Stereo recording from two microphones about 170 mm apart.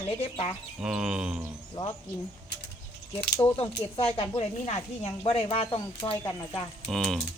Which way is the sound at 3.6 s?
35° left (ahead or behind).